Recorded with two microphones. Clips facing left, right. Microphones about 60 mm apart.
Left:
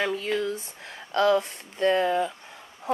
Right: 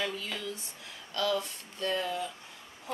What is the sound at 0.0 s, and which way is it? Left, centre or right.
A woman's voice, left.